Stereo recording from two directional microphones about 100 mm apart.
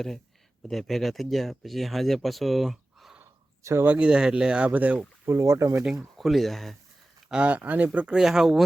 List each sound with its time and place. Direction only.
0.7 s speech: centre (ahead or behind)
3.6 s speech: 30° right (ahead or behind)
3.8 s speech: 10° right (ahead or behind)
5.2 s speech: 25° right (ahead or behind)
5.8 s speech: 5° right (ahead or behind)
7.3 s speech: 10° right (ahead or behind)